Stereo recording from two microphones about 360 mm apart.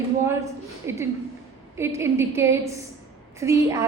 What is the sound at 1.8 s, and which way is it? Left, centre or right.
A woman's voice, centre.